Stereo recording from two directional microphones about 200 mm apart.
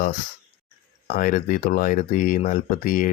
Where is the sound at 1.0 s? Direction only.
40° left (ahead or behind).